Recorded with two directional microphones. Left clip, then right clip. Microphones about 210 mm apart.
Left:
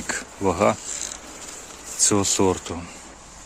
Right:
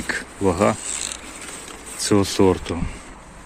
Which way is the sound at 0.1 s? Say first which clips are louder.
Right 2 dB; 10° left (ahead or behind).